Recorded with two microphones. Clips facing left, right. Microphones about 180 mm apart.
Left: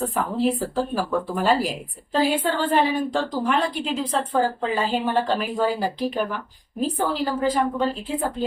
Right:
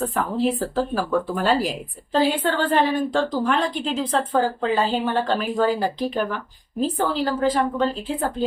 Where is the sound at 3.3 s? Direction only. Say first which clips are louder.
Right 1 dB; 10° left (ahead or behind).